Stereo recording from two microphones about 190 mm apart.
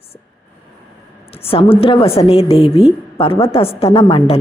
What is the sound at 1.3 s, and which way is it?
A woman's voice, 30° left (ahead or behind).